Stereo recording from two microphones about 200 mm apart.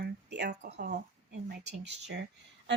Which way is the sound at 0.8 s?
55° right (ahead or behind).